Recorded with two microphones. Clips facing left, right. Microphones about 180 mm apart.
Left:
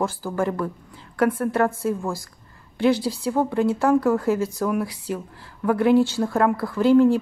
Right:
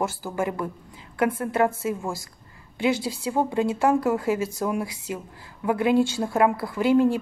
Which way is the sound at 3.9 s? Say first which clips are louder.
Left 5 dB; 25° right (ahead or behind).